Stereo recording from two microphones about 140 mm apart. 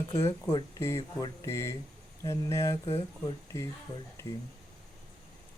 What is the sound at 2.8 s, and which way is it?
Speech, 40° left (ahead or behind).